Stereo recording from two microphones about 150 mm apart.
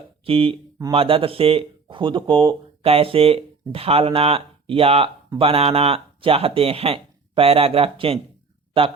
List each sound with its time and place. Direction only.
0.3 s speech: 40° right (ahead or behind)